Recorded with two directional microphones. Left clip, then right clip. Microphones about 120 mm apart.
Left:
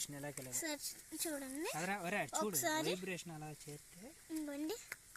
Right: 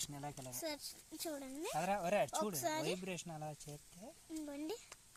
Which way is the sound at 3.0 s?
70° right (ahead or behind).